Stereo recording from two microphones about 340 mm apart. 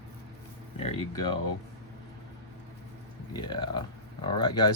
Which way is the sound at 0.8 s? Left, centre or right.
Centre.